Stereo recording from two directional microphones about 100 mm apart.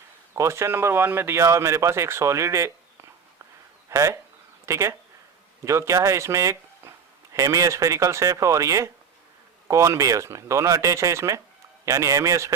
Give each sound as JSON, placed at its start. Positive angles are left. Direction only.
{"t": 0.3, "sound": "speech", "side_deg": -30}